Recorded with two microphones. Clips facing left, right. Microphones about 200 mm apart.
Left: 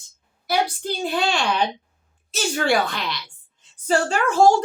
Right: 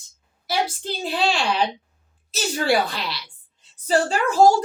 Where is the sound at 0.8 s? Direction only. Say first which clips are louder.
Left 1 dB; 30° right (ahead or behind).